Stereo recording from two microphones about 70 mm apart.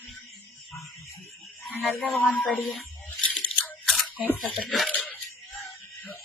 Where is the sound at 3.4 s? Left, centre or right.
Left.